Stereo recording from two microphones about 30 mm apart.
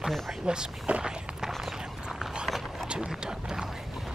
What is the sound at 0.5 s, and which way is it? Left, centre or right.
Speech, right.